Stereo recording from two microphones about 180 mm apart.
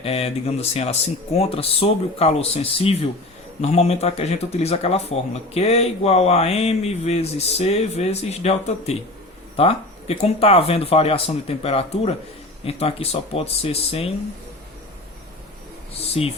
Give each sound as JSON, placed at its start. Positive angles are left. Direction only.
{"t": 0.0, "sound": "speech", "side_deg": 35}